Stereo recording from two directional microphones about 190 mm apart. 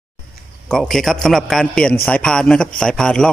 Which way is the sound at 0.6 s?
Centre (ahead or behind).